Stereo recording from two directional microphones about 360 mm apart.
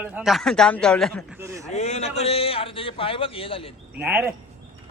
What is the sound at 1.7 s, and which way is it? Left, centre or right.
A man's voice, centre.